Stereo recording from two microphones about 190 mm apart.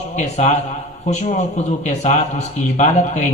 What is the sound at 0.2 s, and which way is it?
A man's voice, 35° left (ahead or behind).